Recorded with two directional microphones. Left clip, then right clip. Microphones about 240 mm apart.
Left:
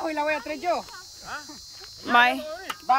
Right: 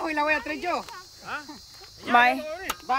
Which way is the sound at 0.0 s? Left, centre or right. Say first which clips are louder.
Right 1 dB; centre.